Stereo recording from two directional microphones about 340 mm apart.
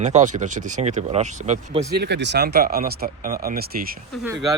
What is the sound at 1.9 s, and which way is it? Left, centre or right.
Speech, right.